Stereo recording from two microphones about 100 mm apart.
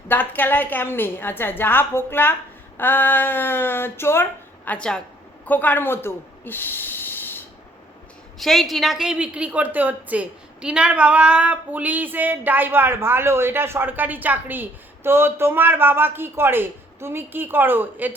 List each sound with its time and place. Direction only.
0.1 s speech: 20° left (ahead or behind)
8.4 s a woman's voice: centre (ahead or behind); by 18.1 s 20° right (ahead or behind)